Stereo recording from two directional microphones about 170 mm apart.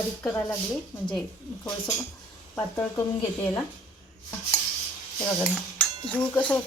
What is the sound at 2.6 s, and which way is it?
Cutlery, 15° left (ahead or behind).